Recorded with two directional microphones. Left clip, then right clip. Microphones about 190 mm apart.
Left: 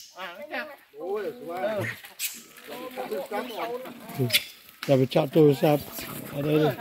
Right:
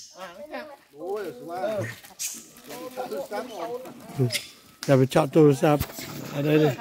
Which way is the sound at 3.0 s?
45° right (ahead or behind).